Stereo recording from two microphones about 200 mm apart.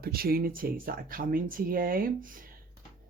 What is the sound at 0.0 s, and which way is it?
Speech, 50° right (ahead or behind).